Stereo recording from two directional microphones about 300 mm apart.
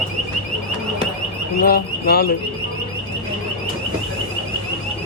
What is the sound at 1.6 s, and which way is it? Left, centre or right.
Speech, left.